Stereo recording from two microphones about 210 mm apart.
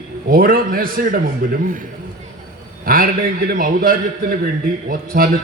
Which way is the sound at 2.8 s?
45° right (ahead or behind).